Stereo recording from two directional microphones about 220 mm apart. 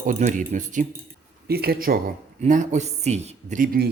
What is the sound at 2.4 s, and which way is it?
Speech, 35° right (ahead or behind).